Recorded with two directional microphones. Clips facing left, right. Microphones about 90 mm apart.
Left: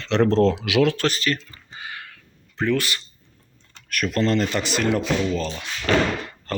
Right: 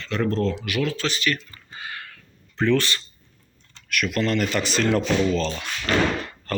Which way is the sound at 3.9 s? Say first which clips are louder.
Left 2 dB; 35° left (ahead or behind).